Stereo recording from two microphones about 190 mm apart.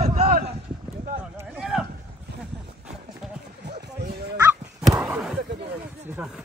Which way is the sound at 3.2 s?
Centre (ahead or behind).